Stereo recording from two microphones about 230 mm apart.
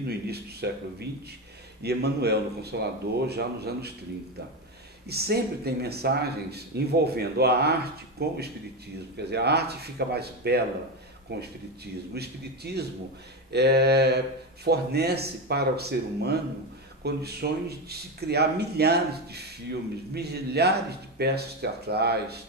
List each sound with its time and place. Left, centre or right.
0.3 s speech: right
5.1 s speech: right